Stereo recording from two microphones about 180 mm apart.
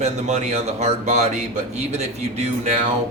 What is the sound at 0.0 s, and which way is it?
Speech, 40° right (ahead or behind).